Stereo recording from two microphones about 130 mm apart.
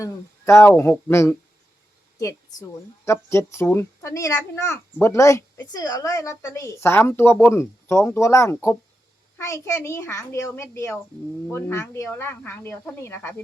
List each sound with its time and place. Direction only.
0.0 s speech: 20° left (ahead or behind)